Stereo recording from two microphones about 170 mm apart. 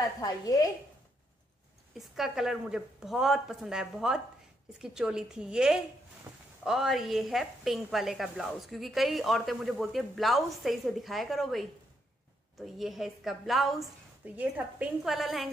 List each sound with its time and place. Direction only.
0.2 s a woman's voice: 20° left (ahead or behind)
2.0 s a woman's voice: centre (ahead or behind)